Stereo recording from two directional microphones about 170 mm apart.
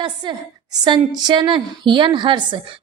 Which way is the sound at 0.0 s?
25° right (ahead or behind).